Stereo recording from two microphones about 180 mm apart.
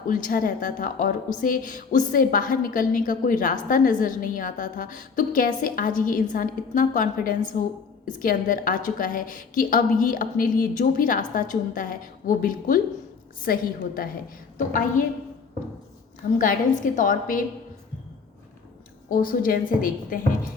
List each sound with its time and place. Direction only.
0.1 s a woman's voice: 50° left (ahead or behind)
16.4 s a woman's voice: 50° left (ahead or behind)
19.1 s a woman's voice: 50° left (ahead or behind)